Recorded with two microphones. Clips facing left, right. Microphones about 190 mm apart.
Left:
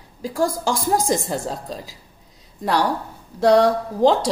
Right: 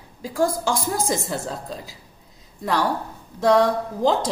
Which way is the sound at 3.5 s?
40° left (ahead or behind).